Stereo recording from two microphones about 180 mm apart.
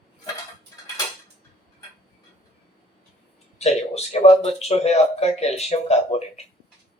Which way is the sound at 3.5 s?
35° left (ahead or behind).